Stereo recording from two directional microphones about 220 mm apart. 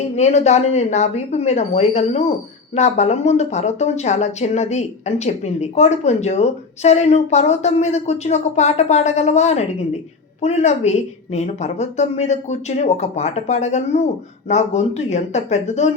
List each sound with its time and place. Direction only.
0.2 s speech: 30° left (ahead or behind)